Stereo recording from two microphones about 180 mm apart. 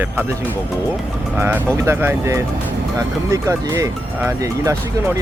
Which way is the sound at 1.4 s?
10° right (ahead or behind).